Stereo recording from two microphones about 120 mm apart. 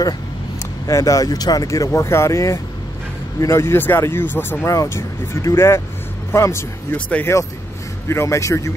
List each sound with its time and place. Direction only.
0.8 s speech: 30° left (ahead or behind); by 7.3 s 15° left (ahead or behind)
8.1 s speech: 25° left (ahead or behind)